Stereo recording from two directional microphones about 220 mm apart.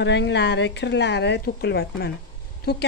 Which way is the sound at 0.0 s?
50° left (ahead or behind).